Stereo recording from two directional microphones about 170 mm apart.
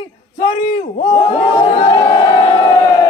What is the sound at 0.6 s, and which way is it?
Crowd, 30° left (ahead or behind).